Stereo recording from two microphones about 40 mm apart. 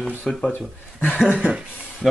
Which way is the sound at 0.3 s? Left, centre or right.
Centre.